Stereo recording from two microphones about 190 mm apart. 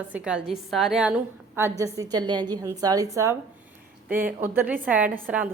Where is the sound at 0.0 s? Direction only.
5° right (ahead or behind).